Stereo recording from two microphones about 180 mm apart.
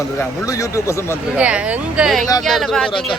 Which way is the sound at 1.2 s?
5° right (ahead or behind).